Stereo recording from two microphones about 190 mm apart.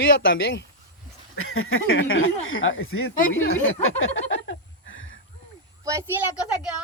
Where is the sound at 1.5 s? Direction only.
90° left.